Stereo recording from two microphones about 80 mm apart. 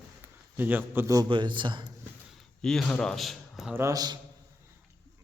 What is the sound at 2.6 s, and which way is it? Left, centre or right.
A man's voice, centre.